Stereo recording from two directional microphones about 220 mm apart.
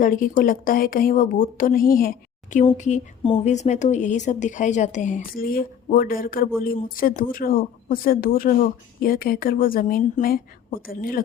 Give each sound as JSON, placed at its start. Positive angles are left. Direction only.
{"t": 0.0, "sound": "speech", "side_deg": 35}